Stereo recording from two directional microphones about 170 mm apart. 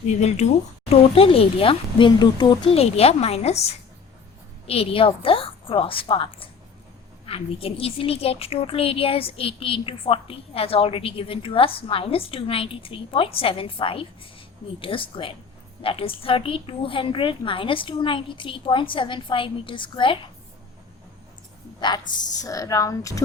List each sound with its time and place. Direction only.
0.1 s a woman's voice: 40° left (ahead or behind)
21.8 s a woman's voice: 25° left (ahead or behind)